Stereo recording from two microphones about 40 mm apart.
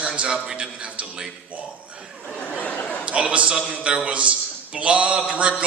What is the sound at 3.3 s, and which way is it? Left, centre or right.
A man's voice, right.